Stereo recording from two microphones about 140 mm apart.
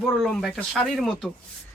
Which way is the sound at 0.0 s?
5° left (ahead or behind).